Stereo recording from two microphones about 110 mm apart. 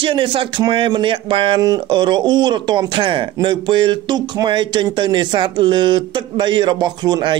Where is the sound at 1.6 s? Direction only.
40° right (ahead or behind).